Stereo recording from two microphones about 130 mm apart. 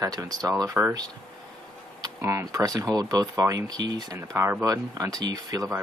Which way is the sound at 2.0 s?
20° right (ahead or behind).